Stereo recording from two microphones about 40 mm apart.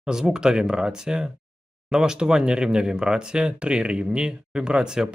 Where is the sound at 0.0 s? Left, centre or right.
Centre.